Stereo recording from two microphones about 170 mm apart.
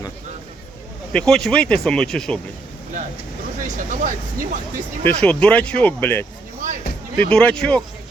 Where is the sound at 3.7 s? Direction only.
50° right (ahead or behind).